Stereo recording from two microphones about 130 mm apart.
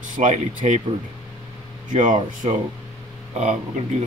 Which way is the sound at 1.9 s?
80° right.